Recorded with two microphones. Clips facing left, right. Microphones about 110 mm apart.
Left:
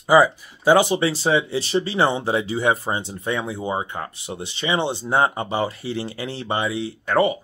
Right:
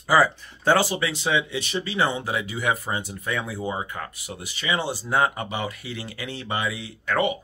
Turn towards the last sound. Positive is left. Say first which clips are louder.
# left 5 dB
turn(degrees=35)  # may be behind; listen again after turning